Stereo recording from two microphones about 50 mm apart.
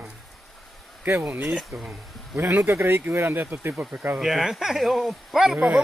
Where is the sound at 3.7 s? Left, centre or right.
Centre.